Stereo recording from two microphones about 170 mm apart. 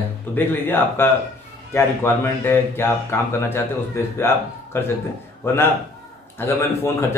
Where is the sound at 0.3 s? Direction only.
10° left (ahead or behind).